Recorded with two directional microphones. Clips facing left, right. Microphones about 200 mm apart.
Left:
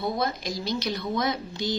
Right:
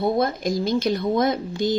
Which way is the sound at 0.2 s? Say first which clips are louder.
Right 7 dB; 50° right (ahead or behind).